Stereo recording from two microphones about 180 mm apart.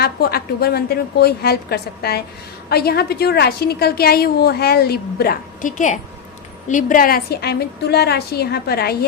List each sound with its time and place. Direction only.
0.0 s a woman's voice: 60° left (ahead or behind)